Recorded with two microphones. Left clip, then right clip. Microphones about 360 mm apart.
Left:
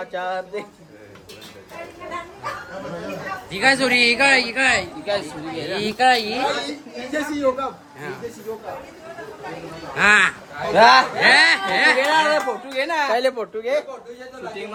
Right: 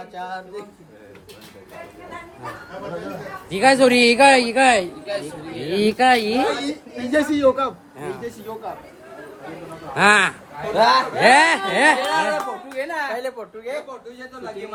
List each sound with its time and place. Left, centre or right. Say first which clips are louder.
0.1 s speech: left 5 dB; centre
3.5 s speech: right 3 dB; centre
9.9 s speech: even; centre
10.8 s speech: left 4 dB; left
11.2 s speech: even; centre
12.1 s speech: left 3 dB; left